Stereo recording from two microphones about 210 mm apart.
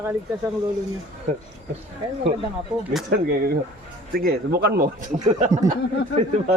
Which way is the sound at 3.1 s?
45° right (ahead or behind).